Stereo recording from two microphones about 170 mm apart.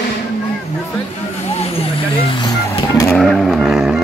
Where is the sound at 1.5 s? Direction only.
35° left (ahead or behind); by 3.1 s 20° left (ahead or behind).